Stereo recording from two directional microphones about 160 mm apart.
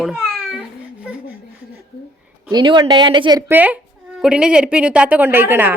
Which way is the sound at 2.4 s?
30° right (ahead or behind).